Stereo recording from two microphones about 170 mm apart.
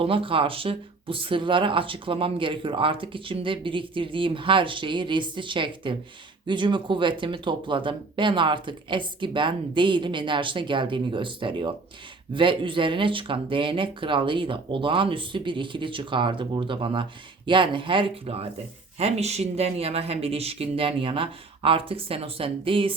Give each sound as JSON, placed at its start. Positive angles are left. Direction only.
{"t": 0.0, "sound": "speech", "side_deg": -30}